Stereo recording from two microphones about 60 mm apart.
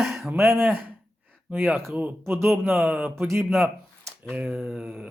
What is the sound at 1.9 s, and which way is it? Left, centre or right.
Speech, right.